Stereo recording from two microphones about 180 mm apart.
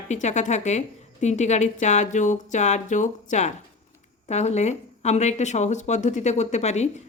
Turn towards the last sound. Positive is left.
turn(degrees=40)  # may be behind; listen again after turning